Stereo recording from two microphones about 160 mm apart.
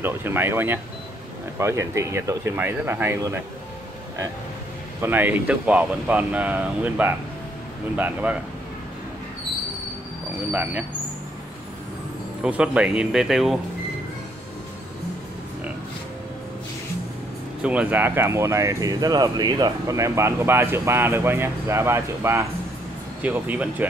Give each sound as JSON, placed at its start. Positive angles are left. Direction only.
{"t": 0.0, "sound": "speech", "side_deg": -15}
{"t": 5.0, "sound": "speech", "side_deg": -10}
{"t": 10.5, "sound": "speech", "side_deg": -10}
{"t": 12.4, "sound": "speech", "side_deg": -5}
{"t": 17.6, "sound": "speech", "side_deg": -10}